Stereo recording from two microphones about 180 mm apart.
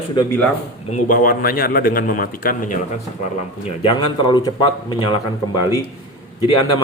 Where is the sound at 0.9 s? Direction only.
50° left (ahead or behind).